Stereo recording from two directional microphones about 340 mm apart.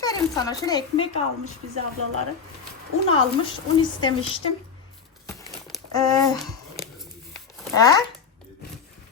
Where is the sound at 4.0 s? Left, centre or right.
Centre.